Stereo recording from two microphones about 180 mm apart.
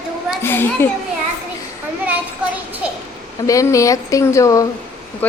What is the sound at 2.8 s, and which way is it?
Child singing, 5° right (ahead or behind).